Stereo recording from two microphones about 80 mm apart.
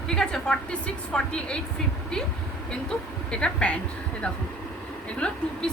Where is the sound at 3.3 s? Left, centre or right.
Centre.